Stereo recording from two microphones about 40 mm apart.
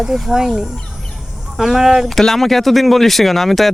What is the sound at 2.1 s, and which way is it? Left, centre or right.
Speech, centre.